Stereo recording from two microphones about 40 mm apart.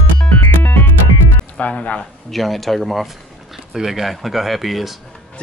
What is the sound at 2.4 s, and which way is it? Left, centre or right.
Speech, centre.